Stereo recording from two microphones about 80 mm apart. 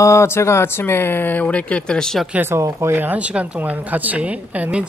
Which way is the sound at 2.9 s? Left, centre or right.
Right.